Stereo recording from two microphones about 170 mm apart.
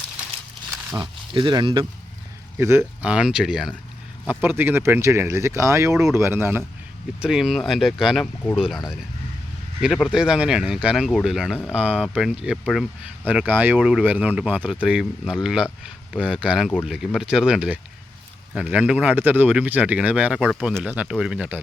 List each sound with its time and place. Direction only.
0.9 s speech: 30° right (ahead or behind)
2.6 s speech: 15° right (ahead or behind)
7.2 s speech: centre (ahead or behind)
9.8 s speech: centre (ahead or behind)